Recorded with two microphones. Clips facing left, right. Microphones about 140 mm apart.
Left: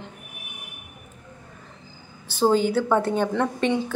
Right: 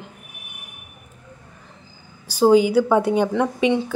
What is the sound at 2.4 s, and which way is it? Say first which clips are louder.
A woman's voice: right 5 dB; 10° right (ahead or behind).